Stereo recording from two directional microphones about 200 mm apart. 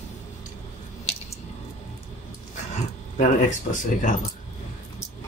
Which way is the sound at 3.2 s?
40° left (ahead or behind).